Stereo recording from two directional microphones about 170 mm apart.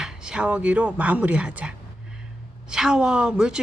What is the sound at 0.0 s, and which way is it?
A woman's voice, 5° right (ahead or behind).